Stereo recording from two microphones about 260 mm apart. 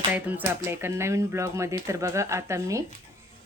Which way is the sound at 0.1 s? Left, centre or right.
Centre.